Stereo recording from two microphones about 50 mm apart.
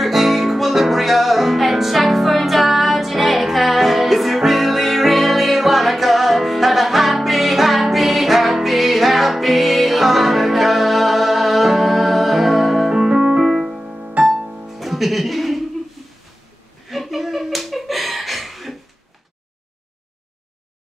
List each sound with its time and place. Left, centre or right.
0.0 s music: centre; by 14.7 s right
14.7 s music: centre
16.9 s slap: centre